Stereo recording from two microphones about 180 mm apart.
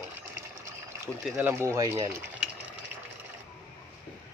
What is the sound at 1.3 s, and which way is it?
Speech, 10° right (ahead or behind).